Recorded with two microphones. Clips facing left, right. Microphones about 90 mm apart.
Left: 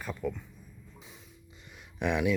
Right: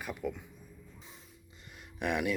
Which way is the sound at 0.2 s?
45° left (ahead or behind).